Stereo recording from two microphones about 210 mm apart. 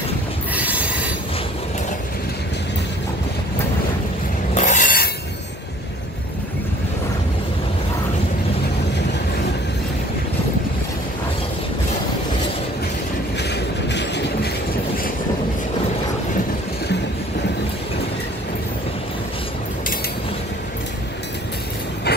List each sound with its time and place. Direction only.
0.6 s rail transport: 5° right (ahead or behind)
4.6 s rub: 35° left (ahead or behind)
13.4 s train: 55° left (ahead or behind)